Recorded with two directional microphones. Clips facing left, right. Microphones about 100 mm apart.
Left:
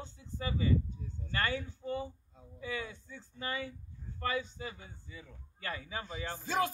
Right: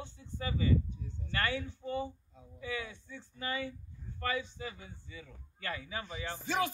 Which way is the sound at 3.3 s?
30° left (ahead or behind).